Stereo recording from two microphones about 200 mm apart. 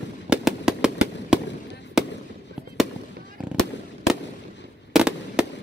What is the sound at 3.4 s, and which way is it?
Fireworks, 5° right (ahead or behind).